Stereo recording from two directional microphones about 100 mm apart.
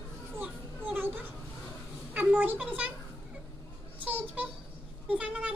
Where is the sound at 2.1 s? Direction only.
15° right (ahead or behind).